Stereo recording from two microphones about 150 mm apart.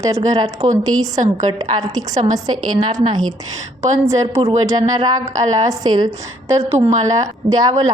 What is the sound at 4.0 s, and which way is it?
A woman's voice, 20° right (ahead or behind).